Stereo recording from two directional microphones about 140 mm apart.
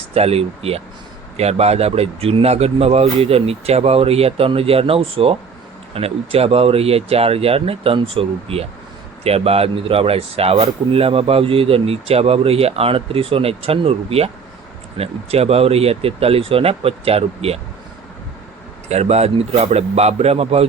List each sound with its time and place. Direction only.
0.1 s speech: 45° right (ahead or behind)
18.9 s speech: 50° right (ahead or behind)